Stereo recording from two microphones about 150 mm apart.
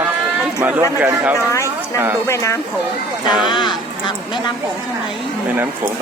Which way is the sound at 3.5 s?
30° left (ahead or behind).